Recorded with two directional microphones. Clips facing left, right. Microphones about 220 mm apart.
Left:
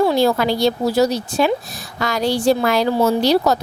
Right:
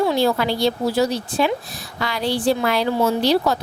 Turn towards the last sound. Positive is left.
turn(degrees=40)  # may be behind; listen again after turning